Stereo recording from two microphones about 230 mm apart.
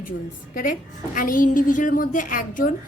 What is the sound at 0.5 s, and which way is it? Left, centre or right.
A woman's voice, left.